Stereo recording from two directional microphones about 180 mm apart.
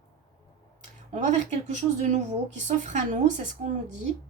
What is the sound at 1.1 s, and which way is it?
Speech, 45° right (ahead or behind).